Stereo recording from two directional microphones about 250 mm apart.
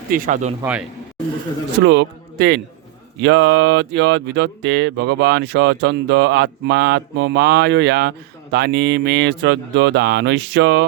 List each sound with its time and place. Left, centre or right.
0.1 s speech: right
0.6 s a man's voice: centre
1.8 s a man's voice: right